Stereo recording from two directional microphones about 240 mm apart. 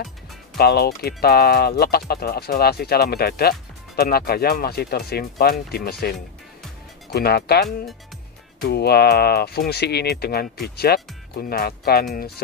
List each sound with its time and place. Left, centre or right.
0.6 s speech: left